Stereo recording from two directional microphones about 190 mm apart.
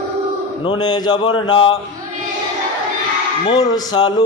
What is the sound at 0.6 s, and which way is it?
Speech, 25° left (ahead or behind).